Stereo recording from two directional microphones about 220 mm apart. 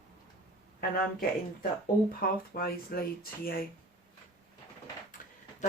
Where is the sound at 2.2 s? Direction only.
45° left (ahead or behind).